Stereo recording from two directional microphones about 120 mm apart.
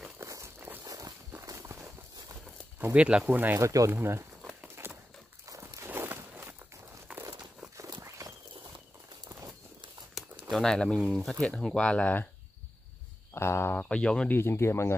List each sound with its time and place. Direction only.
0.2 s walk: 25° right (ahead or behind)
0.8 s walk: 30° right (ahead or behind)
2.8 s speech: 10° right (ahead or behind)
4.8 s a sound: 20° right (ahead or behind)
5.5 s walk: 25° right (ahead or behind)
8.2 s walk: 30° right (ahead or behind)
10.5 s speech: 5° left (ahead or behind)
13.3 s speech: 20° left (ahead or behind)
14.4 s speech: 20° left (ahead or behind)